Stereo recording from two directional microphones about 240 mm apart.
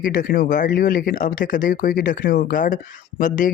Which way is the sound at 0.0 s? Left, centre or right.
Left.